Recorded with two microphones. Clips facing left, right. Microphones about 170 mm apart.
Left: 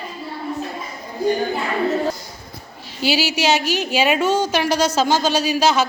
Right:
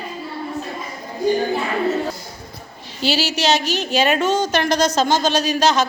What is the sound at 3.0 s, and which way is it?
A woman's voice, 10° left (ahead or behind).